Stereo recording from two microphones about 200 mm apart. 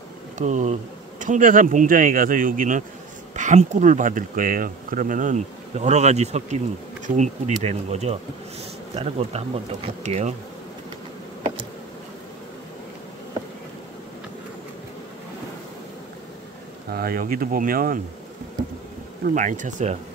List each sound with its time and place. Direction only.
0.4 s speech: 35° right (ahead or behind)
16.9 s speech: 50° right (ahead or behind)
19.2 s speech: 40° right (ahead or behind)